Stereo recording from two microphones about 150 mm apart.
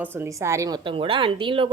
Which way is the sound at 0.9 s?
35° right (ahead or behind).